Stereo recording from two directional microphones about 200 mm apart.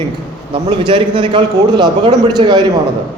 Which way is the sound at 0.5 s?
25° right (ahead or behind).